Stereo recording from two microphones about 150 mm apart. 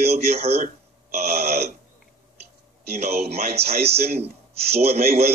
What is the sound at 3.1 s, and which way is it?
Speech, 90° right.